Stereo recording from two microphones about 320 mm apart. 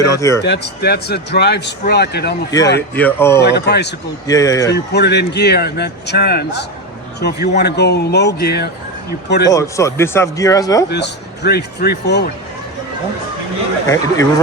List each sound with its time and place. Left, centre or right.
0.2 s speech: centre
0.4 s speech: left
2.5 s speech: centre
3.4 s speech: left
4.3 s speech: centre
4.7 s speech: left
9.5 s speech: centre
10.8 s speech: left
13.8 s speech: centre